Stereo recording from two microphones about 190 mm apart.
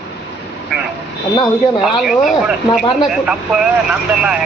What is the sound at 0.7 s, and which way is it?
Vehicle, 5° right (ahead or behind).